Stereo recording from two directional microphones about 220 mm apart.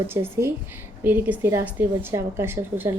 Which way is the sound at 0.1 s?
10° right (ahead or behind).